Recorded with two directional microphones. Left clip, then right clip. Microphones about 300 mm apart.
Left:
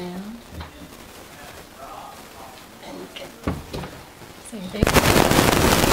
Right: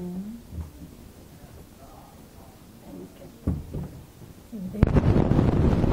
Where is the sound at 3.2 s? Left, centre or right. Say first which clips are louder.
Left 6 dB; centre.